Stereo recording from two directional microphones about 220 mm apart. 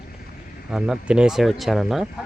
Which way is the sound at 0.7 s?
5° right (ahead or behind).